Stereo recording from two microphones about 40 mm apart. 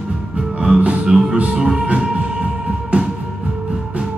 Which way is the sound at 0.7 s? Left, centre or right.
Right.